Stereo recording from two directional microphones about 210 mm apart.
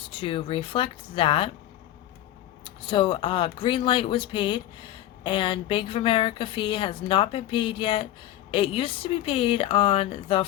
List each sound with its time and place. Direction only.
0.0 s speech: 25° left (ahead or behind)
2.8 s speech: 25° left (ahead or behind)